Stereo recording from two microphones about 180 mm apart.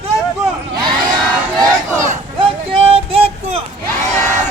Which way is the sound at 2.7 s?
35° right (ahead or behind).